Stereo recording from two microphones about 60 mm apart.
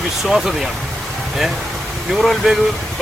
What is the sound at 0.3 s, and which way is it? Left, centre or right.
Speech, centre.